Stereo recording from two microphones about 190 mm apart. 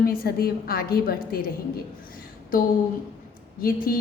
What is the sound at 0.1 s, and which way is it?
A woman's voice, 50° left (ahead or behind).